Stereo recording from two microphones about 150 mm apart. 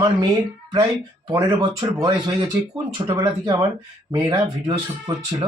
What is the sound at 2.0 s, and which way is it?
Speech, 30° right (ahead or behind).